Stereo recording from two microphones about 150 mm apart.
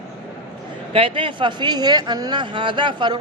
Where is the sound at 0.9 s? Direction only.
35° right (ahead or behind).